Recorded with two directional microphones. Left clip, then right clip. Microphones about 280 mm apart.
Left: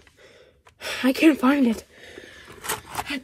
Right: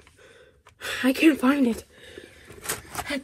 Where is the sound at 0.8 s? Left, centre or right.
Centre.